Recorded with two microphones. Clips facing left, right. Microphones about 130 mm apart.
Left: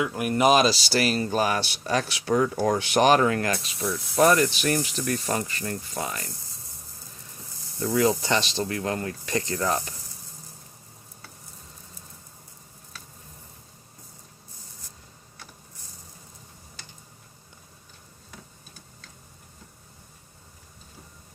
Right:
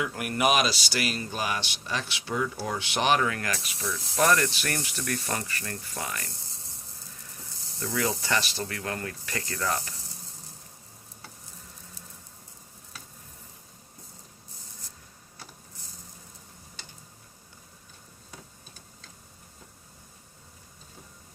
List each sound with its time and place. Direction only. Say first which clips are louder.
0.0 s speech: left 5 dB; 20° left (ahead or behind)
7.8 s speech: left 7 dB; 25° left (ahead or behind)